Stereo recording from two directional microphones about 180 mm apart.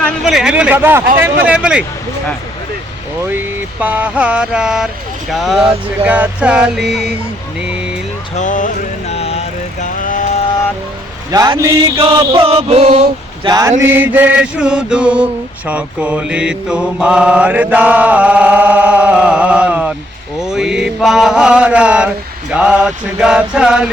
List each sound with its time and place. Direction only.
0.3 s mantra: 5° right (ahead or behind)
3.3 s mantra: 10° right (ahead or behind)
8.4 s vehicle: 45° left (ahead or behind)
11.3 s chant: 20° right (ahead or behind); by 13.5 s 35° right (ahead or behind)
13.5 s chant: 20° right (ahead or behind)
13.8 s mantra: 10° right (ahead or behind)